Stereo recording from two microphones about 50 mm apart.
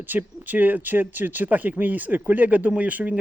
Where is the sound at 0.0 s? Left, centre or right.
Right.